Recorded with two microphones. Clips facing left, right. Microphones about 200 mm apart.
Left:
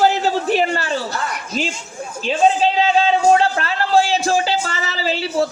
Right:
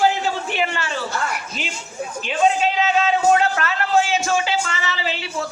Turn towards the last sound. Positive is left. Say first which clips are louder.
# left 7 dB
turn(degrees=35)  # may be behind; listen again after turning